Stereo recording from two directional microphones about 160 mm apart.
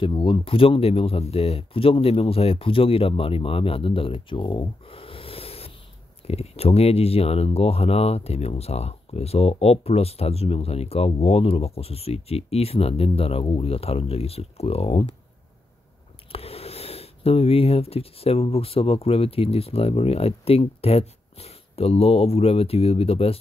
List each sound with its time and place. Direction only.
0.0 s speech: 30° left (ahead or behind)
16.3 s speech: 40° left (ahead or behind)